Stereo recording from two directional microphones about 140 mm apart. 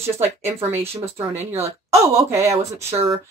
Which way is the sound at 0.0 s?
20° right (ahead or behind).